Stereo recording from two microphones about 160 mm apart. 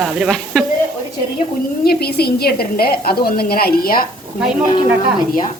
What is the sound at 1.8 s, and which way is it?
A woman's voice, 80° left.